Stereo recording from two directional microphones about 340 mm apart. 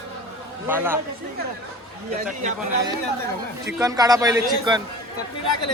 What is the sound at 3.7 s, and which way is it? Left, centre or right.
Speech, centre.